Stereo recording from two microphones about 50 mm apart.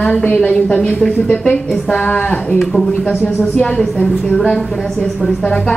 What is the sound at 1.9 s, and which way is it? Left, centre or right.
Speech, left.